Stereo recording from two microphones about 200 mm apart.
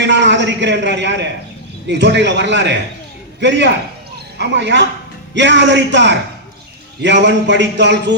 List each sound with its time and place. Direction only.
0.0 s a sound: 60° right (ahead or behind)
1.9 s speech: 60° right (ahead or behind)
4.4 s speech: 60° right (ahead or behind)